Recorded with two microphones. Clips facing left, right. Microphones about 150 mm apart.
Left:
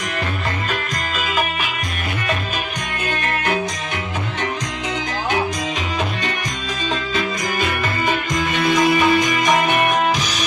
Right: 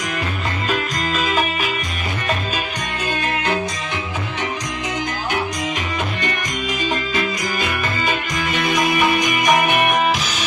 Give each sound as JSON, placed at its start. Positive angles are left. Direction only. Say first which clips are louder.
{"t": 8.6, "sound": "music", "louder": "left 3 dB", "side_deg": -20}